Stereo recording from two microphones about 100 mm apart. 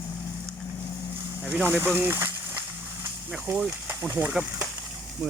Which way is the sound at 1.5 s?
20° right (ahead or behind).